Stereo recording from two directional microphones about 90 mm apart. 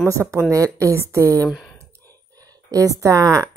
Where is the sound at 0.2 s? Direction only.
15° right (ahead or behind).